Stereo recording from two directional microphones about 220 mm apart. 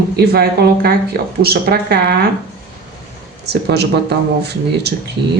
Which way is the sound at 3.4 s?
50° right (ahead or behind).